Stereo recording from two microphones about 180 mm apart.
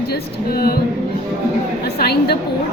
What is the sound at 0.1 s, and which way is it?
Speech, 60° left (ahead or behind).